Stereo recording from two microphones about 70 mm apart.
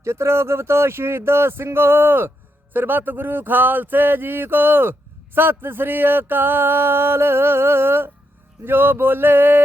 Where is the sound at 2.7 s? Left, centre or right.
Right.